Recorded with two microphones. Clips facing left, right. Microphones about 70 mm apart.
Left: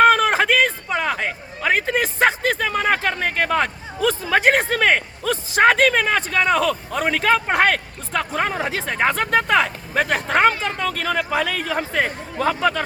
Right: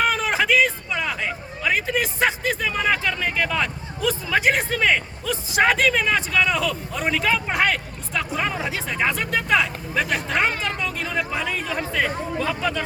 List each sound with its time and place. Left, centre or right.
0.0 s a man's voice: left
11.7 s speech: left